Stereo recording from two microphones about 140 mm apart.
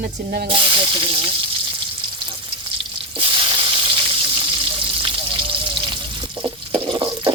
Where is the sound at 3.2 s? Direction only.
35° right (ahead or behind).